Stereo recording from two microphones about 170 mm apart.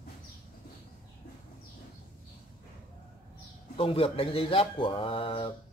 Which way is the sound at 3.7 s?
35° left (ahead or behind).